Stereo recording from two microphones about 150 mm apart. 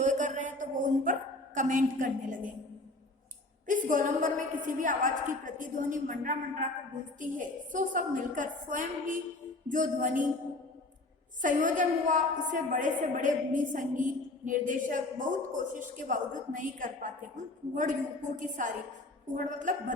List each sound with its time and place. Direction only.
0.0 s a sound: 55° right (ahead or behind)
1.5 s a woman's voice: 60° right (ahead or behind)
3.7 s a woman's voice: 60° right (ahead or behind)
11.4 s a woman's voice: 60° right (ahead or behind)